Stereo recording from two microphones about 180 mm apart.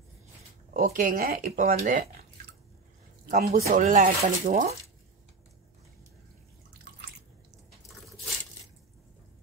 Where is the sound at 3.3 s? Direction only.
40° right (ahead or behind).